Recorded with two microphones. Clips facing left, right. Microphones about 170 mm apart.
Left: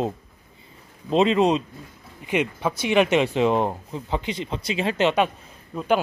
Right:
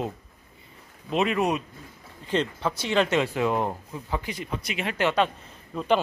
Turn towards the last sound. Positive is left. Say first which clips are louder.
# left 1 dB
turn(degrees=5)  # may be behind; listen again after turning